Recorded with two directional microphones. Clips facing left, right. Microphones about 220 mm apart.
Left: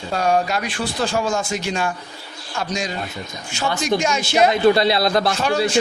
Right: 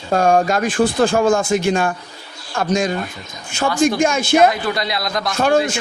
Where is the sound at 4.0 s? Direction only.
50° right (ahead or behind).